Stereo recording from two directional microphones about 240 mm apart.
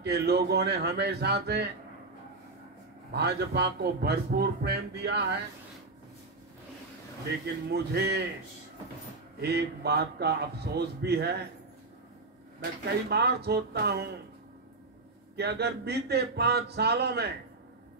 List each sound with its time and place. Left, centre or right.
0.0 s a man's voice: right
3.1 s a man's voice: right
7.7 s a man's voice: right
9.4 s a man's voice: right
12.8 s a man's voice: right
15.3 s a man's voice: right